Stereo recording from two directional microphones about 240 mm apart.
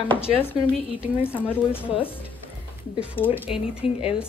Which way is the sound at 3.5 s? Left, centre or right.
Centre.